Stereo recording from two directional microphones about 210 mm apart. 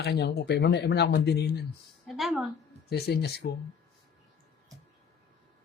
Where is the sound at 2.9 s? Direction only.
50° left (ahead or behind).